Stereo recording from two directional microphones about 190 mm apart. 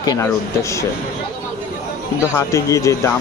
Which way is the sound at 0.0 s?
15° left (ahead or behind).